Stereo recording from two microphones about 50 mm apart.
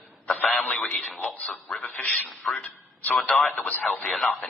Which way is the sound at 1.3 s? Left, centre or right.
Left.